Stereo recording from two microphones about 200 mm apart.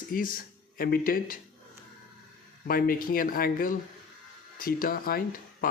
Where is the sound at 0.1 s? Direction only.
45° left (ahead or behind).